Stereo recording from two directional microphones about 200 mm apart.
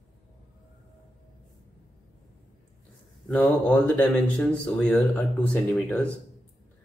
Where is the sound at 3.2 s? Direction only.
5° left (ahead or behind).